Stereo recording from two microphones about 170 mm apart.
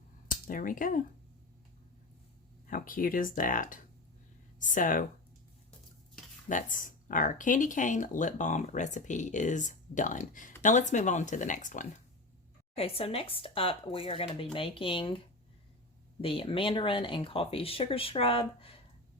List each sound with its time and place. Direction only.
0.3 s speech: 55° left (ahead or behind)
2.6 s speech: 55° left (ahead or behind)
6.5 s speech: 50° left (ahead or behind)
12.7 s speech: 35° left (ahead or behind)
16.2 s speech: 30° left (ahead or behind)